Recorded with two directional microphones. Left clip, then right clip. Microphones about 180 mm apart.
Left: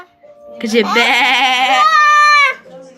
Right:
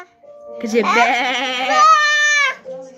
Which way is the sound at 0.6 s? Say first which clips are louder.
Left 2 dB; 10° right (ahead or behind).